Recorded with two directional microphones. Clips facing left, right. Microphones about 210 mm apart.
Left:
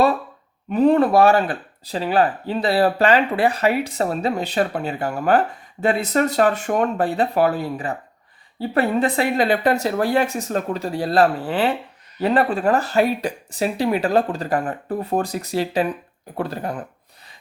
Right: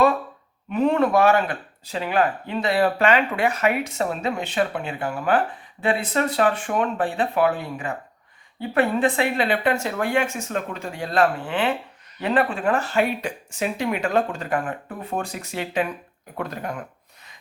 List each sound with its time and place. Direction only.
0.7 s speech: 35° left (ahead or behind)